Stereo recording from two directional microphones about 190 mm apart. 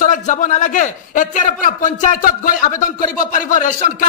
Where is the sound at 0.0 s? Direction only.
40° left (ahead or behind).